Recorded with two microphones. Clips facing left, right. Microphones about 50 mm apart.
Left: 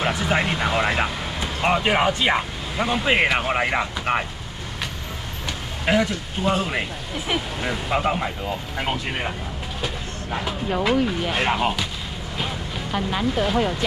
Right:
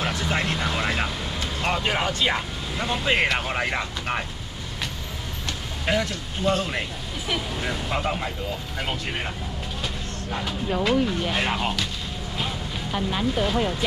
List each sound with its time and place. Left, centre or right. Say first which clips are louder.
0.0 s speech: left 4 dB; centre
5.9 s speech: left 4 dB; centre
10.3 s speech: left 2 dB; centre